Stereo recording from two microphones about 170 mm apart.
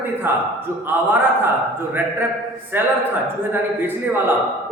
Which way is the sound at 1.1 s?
10° right (ahead or behind).